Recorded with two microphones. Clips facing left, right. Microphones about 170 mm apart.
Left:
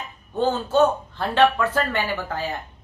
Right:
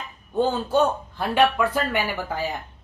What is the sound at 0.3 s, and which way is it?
A man's voice, 10° right (ahead or behind).